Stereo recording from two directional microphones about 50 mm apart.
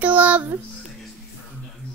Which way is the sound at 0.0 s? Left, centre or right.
Right.